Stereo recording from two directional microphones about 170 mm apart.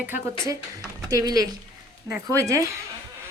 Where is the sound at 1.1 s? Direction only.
20° right (ahead or behind).